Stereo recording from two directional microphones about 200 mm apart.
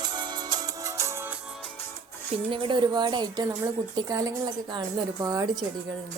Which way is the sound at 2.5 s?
25° right (ahead or behind).